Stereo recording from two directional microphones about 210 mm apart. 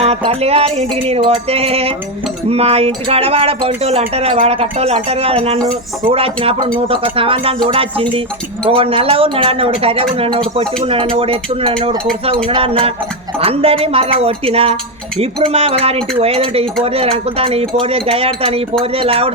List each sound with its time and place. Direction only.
0.0 s speech: 25° right (ahead or behind)